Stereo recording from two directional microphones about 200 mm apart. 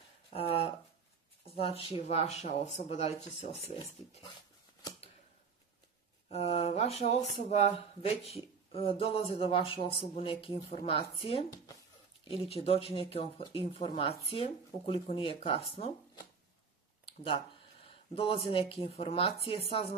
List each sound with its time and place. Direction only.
0.3 s a sound: 30° left (ahead or behind)
1.4 s speech: 30° left (ahead or behind)
6.2 s speech: 30° left (ahead or behind)